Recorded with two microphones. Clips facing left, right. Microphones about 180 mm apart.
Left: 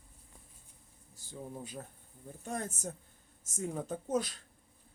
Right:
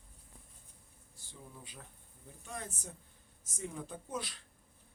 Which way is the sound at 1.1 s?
45° left (ahead or behind).